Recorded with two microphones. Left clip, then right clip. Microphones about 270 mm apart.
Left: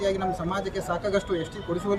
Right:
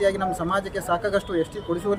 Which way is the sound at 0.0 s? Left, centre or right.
Centre.